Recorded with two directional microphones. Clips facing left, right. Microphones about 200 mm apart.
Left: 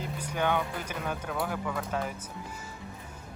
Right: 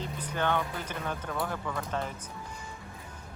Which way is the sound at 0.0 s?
10° left (ahead or behind).